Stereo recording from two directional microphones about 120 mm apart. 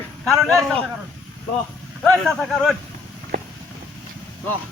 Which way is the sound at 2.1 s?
5° left (ahead or behind).